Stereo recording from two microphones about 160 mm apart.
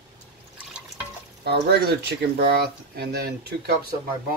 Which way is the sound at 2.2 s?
75° right (ahead or behind).